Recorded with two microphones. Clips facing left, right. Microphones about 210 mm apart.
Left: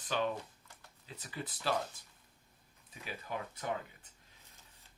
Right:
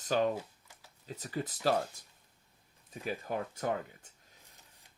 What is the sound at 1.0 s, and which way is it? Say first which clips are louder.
Speech: right 7 dB; 40° right (ahead or behind).